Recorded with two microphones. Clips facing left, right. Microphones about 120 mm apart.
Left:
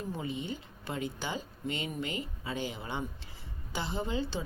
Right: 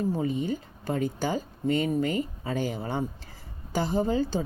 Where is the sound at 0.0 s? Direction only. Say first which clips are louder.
Right 9 dB; 40° right (ahead or behind).